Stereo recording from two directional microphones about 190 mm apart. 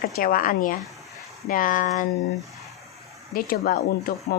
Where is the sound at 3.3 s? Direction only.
50° left (ahead or behind).